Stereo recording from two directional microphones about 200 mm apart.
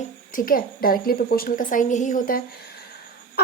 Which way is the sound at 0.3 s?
45° left (ahead or behind).